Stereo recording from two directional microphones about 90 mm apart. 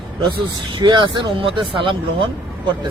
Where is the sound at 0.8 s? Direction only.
55° right (ahead or behind); by 2.2 s 70° right (ahead or behind).